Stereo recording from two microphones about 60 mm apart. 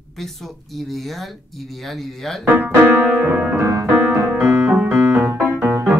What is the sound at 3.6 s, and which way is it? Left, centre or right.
Piano, right.